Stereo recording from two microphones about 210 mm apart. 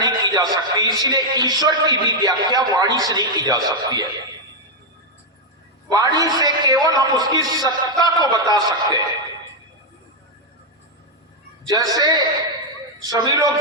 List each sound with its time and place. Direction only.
0.0 s a man's voice: 20° right (ahead or behind)
5.9 s a man's voice: 20° right (ahead or behind)
11.6 s a man's voice: 15° right (ahead or behind)